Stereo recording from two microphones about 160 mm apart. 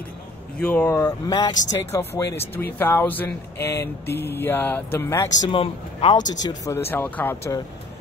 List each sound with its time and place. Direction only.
0.6 s speech: 10° left (ahead or behind)
0.8 s speech: 20° left (ahead or behind)
5.5 s speech: 35° left (ahead or behind); by 7.5 s 10° left (ahead or behind)